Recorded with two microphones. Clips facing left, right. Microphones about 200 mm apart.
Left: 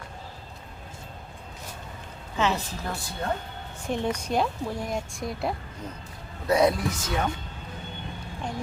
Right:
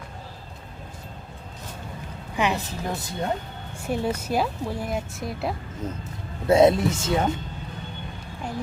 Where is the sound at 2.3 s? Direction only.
15° right (ahead or behind).